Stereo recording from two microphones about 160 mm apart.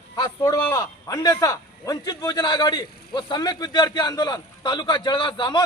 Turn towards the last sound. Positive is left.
turn(degrees=30)  # may be behind; listen again after turning